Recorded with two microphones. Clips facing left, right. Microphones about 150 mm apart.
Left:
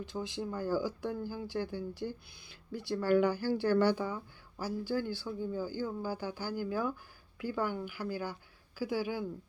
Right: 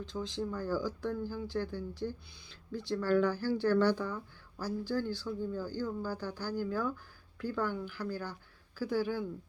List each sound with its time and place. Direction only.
0.0 s speech: 10° left (ahead or behind)